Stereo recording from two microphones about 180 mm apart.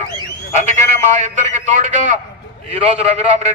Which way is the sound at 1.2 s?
40° right (ahead or behind).